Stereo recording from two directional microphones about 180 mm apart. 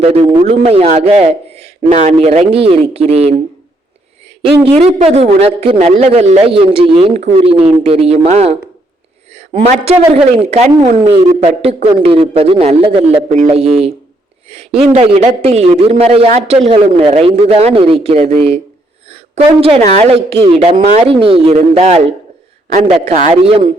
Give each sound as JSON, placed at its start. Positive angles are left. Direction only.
{"t": 0.0, "sound": "speech", "side_deg": -35}
{"t": 4.6, "sound": "speech", "side_deg": -35}
{"t": 9.3, "sound": "a sound", "side_deg": -35}
{"t": 10.4, "sound": "speech", "side_deg": -40}
{"t": 13.2, "sound": "a woman's voice", "side_deg": -40}
{"t": 23.3, "sound": "a man's voice", "side_deg": -30}